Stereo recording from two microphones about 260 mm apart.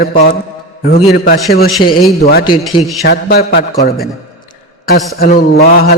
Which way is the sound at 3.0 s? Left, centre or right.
Left.